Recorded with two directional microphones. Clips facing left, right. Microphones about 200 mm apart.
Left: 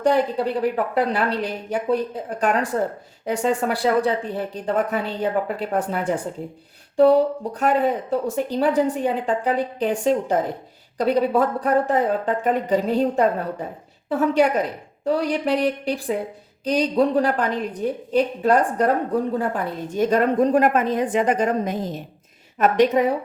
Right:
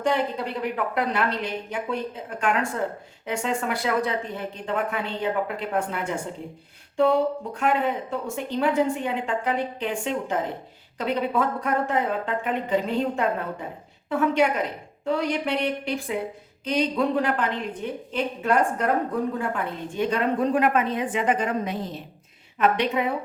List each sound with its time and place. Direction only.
0.0 s a woman's voice: 35° left (ahead or behind)